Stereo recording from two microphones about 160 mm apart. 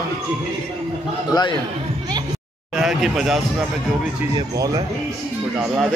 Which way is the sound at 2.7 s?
Centre (ahead or behind).